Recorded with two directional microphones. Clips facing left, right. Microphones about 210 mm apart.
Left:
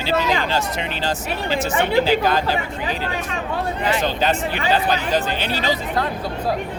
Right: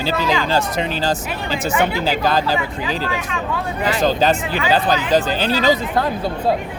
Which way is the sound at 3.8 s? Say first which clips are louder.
Right 5 dB; 40° right (ahead or behind).